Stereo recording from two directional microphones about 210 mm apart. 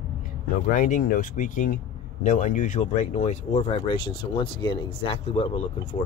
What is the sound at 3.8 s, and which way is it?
Speech, 25° left (ahead or behind).